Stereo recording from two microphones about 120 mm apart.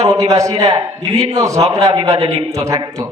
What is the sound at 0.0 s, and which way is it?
A man's voice, 30° right (ahead or behind).